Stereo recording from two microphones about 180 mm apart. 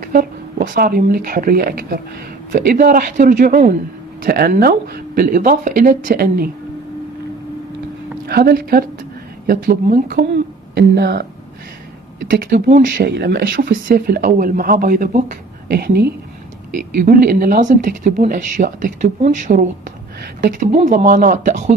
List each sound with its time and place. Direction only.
0.0 s speech: 50° right (ahead or behind)
8.3 s speech: 60° right (ahead or behind)
10.7 s speech: 65° right (ahead or behind); by 12.8 s 50° right (ahead or behind)
12.8 s speech: 65° right (ahead or behind)
16.7 s speech: 50° right (ahead or behind)